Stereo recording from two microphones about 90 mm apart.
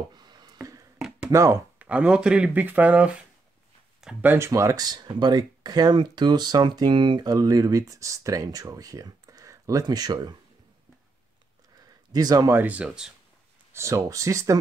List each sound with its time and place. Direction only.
0.1 s a sound: 50° right (ahead or behind)
0.6 s a sound: 40° right (ahead or behind)
0.9 s a sound: 5° right (ahead or behind)
1.3 s speech: 35° right (ahead or behind)
1.8 s speech: 15° right (ahead or behind)
4.5 s speech: 35° right (ahead or behind)
9.8 s speech: 50° right (ahead or behind)
12.1 s speech: 45° right (ahead or behind)
12.4 s speech: 20° right (ahead or behind)
13.7 s speech: 35° right (ahead or behind)